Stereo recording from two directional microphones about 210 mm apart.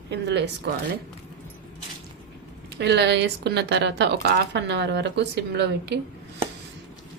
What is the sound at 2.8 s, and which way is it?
Speech, 55° right (ahead or behind).